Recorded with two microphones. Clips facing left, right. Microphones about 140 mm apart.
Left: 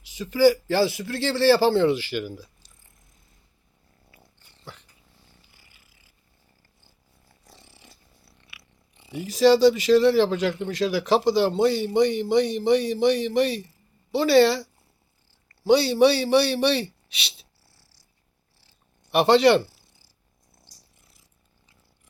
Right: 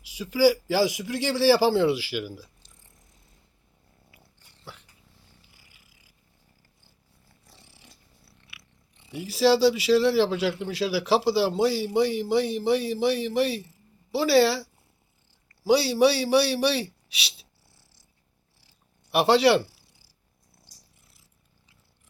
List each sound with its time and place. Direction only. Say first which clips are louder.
0.0 s a man's voice: left 2 dB; 10° right (ahead or behind)
4.6 s dog: left 1 dB; 5° right (ahead or behind)
5.5 s a sound: even; 10° right (ahead or behind)
7.5 s a sound: left 3 dB; 10° right (ahead or behind)
9.2 s speech: left 3 dB; 5° right (ahead or behind)
17.7 s purr: even; 20° right (ahead or behind)
19.1 s speech: left 2 dB; 5° right (ahead or behind)